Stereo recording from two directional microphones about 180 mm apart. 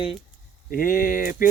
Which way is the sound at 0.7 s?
50° left (ahead or behind).